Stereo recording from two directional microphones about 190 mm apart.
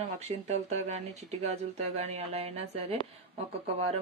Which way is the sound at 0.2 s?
35° right (ahead or behind).